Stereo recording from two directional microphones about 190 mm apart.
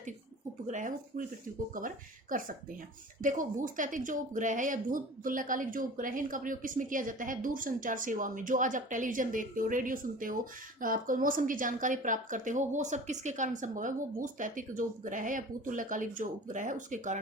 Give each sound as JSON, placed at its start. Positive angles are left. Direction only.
{"t": 0.7, "sound": "speech", "side_deg": -40}